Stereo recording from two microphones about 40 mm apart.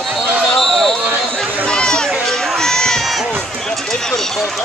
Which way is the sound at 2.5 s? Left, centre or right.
Centre.